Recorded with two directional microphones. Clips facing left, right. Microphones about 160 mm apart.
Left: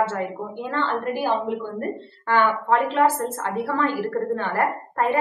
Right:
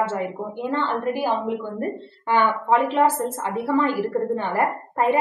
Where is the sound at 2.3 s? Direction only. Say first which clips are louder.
Even; 15° right (ahead or behind).